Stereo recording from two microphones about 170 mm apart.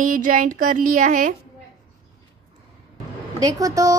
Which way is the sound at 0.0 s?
50° right (ahead or behind).